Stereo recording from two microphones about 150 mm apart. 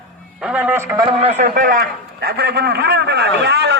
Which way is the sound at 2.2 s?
90° right.